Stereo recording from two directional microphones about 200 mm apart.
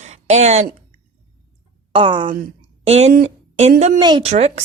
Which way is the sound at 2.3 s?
35° right (ahead or behind).